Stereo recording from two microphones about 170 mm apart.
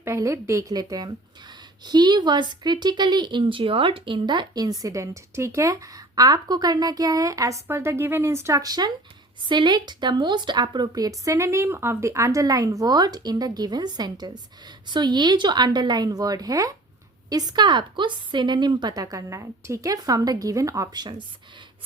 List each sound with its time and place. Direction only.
0.0 s speech: 15° right (ahead or behind)